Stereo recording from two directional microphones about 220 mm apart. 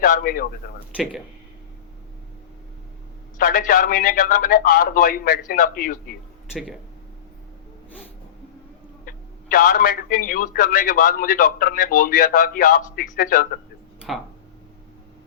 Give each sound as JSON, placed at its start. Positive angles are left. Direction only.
{"t": 0.0, "sound": "a man's voice", "side_deg": 40}
{"t": 3.3, "sound": "a man's voice", "side_deg": 40}
{"t": 6.5, "sound": "speech", "side_deg": 0}
{"t": 9.0, "sound": "a man's voice", "side_deg": 40}
{"t": 14.1, "sound": "speech", "side_deg": 0}